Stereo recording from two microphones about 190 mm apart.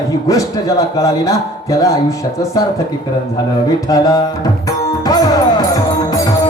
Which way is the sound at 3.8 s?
20° left (ahead or behind).